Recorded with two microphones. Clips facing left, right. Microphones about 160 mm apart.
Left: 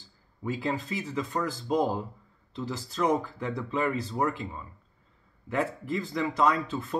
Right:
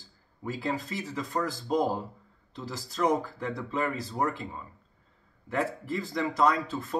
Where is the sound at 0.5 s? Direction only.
40° right (ahead or behind).